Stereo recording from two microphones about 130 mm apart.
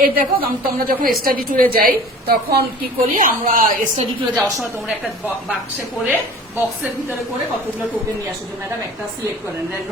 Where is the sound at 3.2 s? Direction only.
90° right.